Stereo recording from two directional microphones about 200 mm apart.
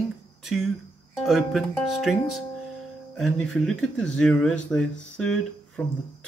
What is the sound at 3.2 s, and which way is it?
Speech, centre (ahead or behind).